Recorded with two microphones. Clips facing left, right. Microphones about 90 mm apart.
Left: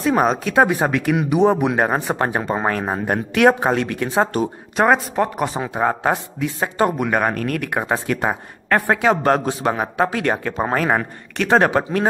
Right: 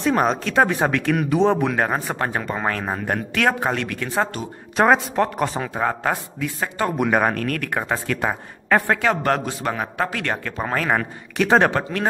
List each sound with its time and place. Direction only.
0.0 s a man's voice: 10° left (ahead or behind)
4.7 s speech: centre (ahead or behind); by 7.0 s 20° left (ahead or behind)
7.0 s a man's voice: centre (ahead or behind)
11.3 s a man's voice: centre (ahead or behind)
11.7 s speech: 15° left (ahead or behind)